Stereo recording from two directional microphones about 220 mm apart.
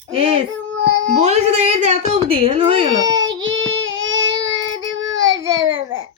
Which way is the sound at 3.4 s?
60° right (ahead or behind).